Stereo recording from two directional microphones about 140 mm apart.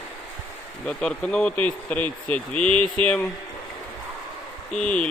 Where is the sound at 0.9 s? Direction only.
5° left (ahead or behind).